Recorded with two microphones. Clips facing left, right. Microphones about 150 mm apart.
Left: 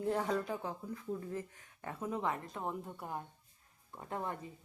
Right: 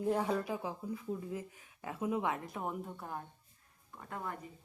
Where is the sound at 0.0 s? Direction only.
10° right (ahead or behind).